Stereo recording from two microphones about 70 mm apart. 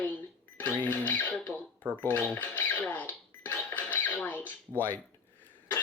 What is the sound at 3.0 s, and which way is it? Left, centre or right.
Cash register, left.